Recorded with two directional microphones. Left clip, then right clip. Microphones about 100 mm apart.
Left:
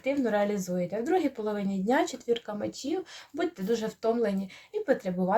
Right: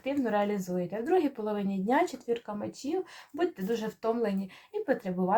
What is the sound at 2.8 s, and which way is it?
Speech, 60° left (ahead or behind).